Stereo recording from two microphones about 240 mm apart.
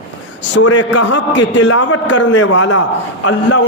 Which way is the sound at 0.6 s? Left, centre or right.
Left.